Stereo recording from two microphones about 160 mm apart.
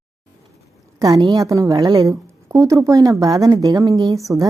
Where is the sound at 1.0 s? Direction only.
20° right (ahead or behind).